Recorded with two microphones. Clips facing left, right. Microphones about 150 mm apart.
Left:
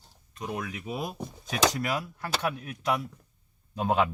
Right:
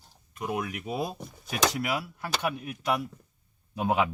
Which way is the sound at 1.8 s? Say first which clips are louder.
Even; 5° right (ahead or behind).